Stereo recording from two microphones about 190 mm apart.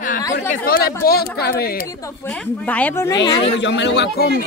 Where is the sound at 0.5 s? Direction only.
50° left (ahead or behind).